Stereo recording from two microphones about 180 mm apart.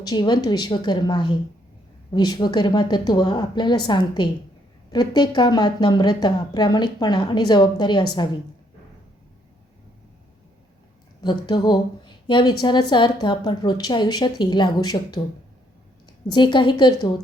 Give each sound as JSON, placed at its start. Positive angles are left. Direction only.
{"t": 0.0, "sound": "a woman's voice", "side_deg": 20}
{"t": 11.2, "sound": "a woman's voice", "side_deg": 25}
{"t": 16.2, "sound": "a woman's voice", "side_deg": 25}